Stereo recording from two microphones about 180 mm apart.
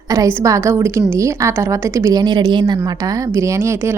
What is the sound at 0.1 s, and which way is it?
A woman's voice, 15° right (ahead or behind).